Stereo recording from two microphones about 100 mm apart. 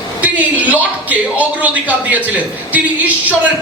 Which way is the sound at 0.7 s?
15° right (ahead or behind).